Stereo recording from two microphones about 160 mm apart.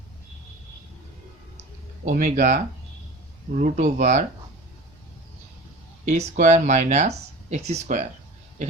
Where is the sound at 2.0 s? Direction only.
50° right (ahead or behind).